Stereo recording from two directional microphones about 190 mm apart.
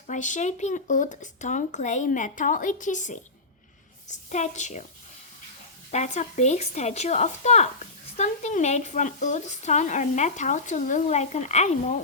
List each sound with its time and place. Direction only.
0.1 s speech: 40° left (ahead or behind)
4.3 s speech: 40° left (ahead or behind)
5.9 s speech: 40° left (ahead or behind)